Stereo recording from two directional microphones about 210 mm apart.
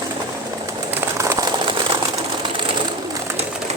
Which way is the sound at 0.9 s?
10° right (ahead or behind).